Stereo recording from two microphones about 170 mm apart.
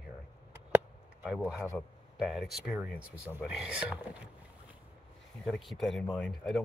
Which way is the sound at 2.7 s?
10° right (ahead or behind).